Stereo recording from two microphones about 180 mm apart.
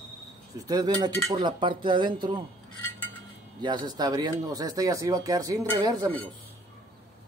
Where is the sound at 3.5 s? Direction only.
25° right (ahead or behind).